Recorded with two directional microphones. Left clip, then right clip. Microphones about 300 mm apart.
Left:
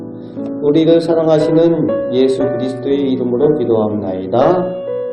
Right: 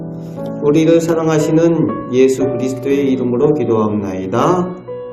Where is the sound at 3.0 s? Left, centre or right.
Right.